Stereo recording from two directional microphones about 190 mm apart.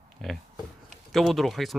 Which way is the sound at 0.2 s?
Centre (ahead or behind).